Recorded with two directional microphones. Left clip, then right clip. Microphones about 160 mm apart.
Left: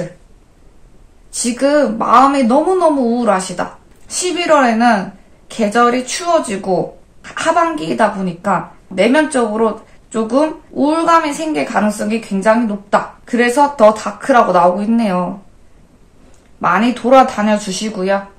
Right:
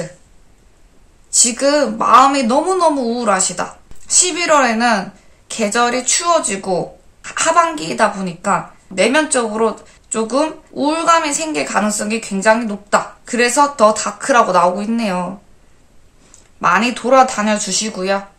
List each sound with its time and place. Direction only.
1.5 s a woman's voice: 20° right (ahead or behind)
16.6 s a woman's voice: 20° right (ahead or behind)